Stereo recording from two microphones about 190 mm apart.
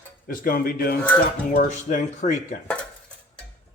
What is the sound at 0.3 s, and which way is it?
Speech, 50° left (ahead or behind).